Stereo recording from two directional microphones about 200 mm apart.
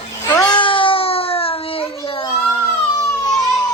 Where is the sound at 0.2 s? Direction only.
15° left (ahead or behind).